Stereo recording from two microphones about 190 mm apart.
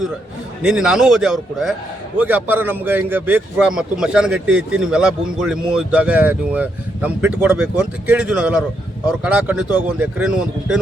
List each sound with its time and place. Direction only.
0.6 s a man's voice: 5° right (ahead or behind)